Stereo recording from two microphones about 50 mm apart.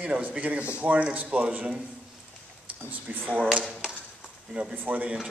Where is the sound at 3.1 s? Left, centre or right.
Right.